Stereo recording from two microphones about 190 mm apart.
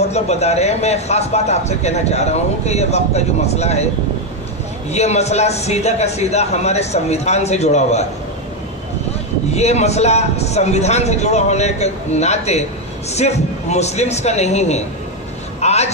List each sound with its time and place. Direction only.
0.1 s speech: 35° left (ahead or behind)
4.9 s speech: 35° left (ahead or behind)
9.6 s a man's voice: 35° left (ahead or behind)